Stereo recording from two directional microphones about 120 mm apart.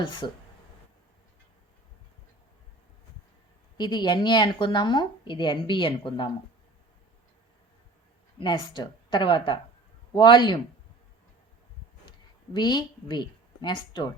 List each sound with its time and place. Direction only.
0.0 s a woman's voice: 40° left (ahead or behind)
3.8 s a woman's voice: 40° left (ahead or behind)
8.4 s a woman's voice: 40° left (ahead or behind)
12.5 s a woman's voice: 35° left (ahead or behind)